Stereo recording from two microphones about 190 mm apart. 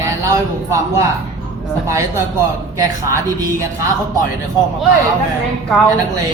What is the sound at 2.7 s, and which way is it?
Speech, 15° right (ahead or behind).